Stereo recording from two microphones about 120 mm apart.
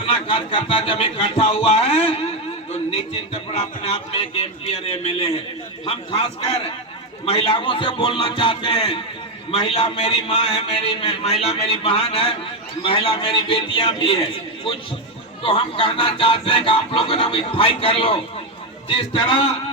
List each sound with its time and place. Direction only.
0.3 s a man's voice: 45° left (ahead or behind)
15.4 s speech: 45° left (ahead or behind)